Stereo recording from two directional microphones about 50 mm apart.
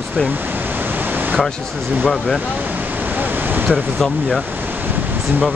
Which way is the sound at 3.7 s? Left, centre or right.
Centre.